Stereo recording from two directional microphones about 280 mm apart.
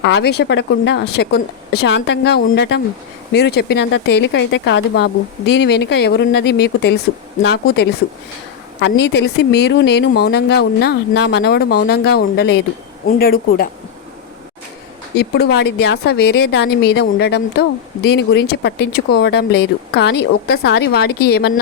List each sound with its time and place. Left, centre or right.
0.0 s speech: left
15.1 s speech: left